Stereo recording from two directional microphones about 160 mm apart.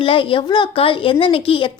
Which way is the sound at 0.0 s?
35° left (ahead or behind).